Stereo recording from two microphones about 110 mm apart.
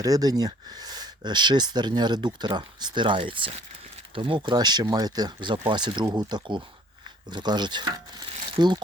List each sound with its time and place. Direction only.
0.0 s speech: 35° right (ahead or behind)